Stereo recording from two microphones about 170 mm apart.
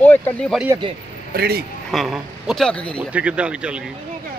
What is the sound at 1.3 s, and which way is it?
Speech, 65° right (ahead or behind).